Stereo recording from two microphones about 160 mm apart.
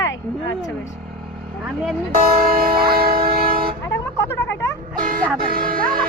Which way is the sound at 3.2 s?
65° right (ahead or behind).